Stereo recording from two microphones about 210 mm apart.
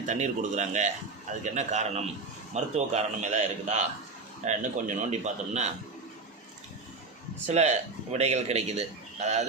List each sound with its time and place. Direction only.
0.0 s a man's voice: 35° right (ahead or behind)
7.4 s a man's voice: 30° right (ahead or behind)